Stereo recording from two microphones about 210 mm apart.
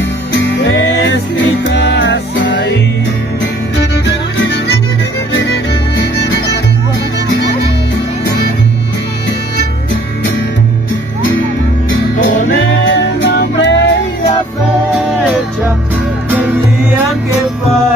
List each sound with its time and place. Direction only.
0.3 s music: 55° left (ahead or behind)
5.5 s music: 50° left (ahead or behind)
12.8 s music: 60° left (ahead or behind)